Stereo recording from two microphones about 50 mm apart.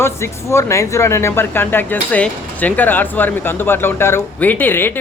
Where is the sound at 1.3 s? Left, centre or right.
Left.